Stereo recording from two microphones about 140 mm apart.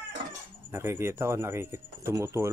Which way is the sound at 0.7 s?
15° right (ahead or behind).